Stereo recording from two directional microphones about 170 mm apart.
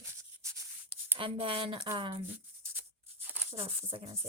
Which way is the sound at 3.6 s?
35° right (ahead or behind).